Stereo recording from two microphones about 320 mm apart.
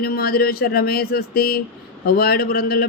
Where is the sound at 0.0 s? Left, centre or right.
Left.